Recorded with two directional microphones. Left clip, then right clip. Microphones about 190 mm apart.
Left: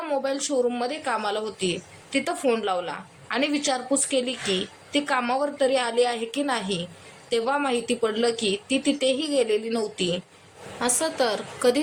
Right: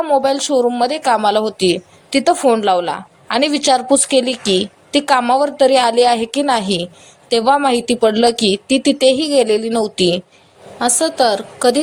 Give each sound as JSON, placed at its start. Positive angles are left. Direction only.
{"t": 0.0, "sound": "a woman's voice", "side_deg": -30}